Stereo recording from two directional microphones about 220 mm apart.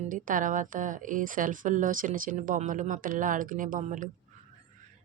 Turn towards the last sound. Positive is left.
turn(degrees=-35)  # may be behind; listen again after turning